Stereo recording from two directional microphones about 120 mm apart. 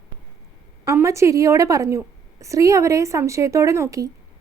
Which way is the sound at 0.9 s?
25° right (ahead or behind).